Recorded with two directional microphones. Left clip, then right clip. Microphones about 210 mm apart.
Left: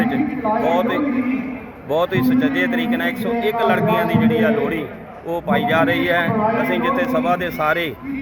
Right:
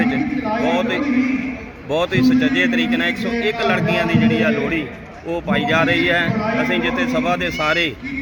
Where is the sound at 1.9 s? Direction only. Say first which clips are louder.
Right 1 dB; centre (ahead or behind).